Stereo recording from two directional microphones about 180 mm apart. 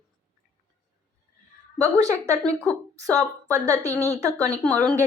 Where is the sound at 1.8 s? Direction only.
20° right (ahead or behind).